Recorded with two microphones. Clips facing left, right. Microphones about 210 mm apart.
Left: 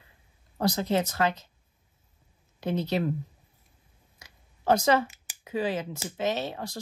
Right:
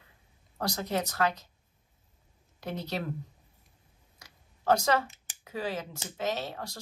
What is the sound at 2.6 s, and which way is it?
Speech, 20° left (ahead or behind).